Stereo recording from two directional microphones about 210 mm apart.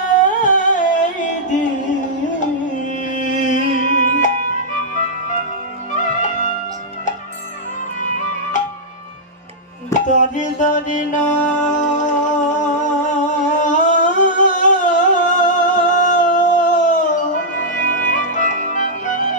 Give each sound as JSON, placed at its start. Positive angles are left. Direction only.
{"t": 0.1, "sound": "music", "side_deg": 35}
{"t": 3.1, "sound": "music", "side_deg": 35}
{"t": 5.9, "sound": "music", "side_deg": 35}
{"t": 9.9, "sound": "music", "side_deg": 35}
{"t": 13.2, "sound": "humming", "side_deg": 35}